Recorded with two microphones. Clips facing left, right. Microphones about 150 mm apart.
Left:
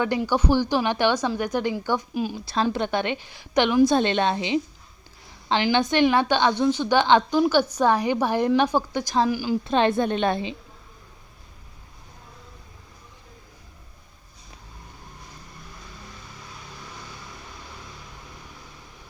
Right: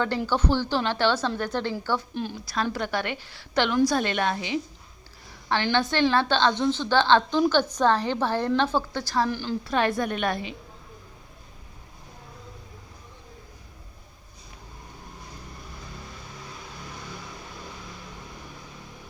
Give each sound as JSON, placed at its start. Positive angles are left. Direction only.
{"t": 0.3, "sound": "a woman's voice", "side_deg": 10}
{"t": 2.4, "sound": "a woman's voice", "side_deg": 25}
{"t": 9.6, "sound": "a woman's voice", "side_deg": 25}